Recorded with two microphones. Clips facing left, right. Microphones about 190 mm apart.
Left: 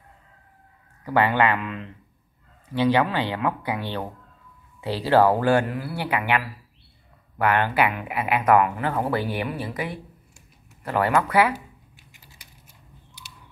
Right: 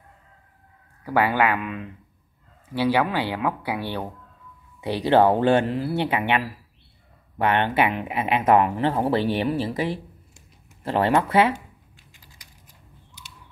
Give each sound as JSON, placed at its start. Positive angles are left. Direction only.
{"t": 1.0, "sound": "speech", "side_deg": -10}